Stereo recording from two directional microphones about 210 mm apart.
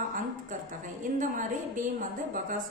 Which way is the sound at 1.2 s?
40° right (ahead or behind).